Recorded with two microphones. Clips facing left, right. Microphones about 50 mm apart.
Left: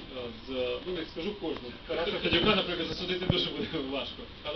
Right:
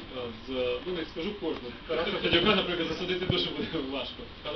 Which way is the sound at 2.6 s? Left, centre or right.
Right.